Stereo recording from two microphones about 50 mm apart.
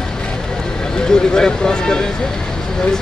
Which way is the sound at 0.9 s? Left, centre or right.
Centre.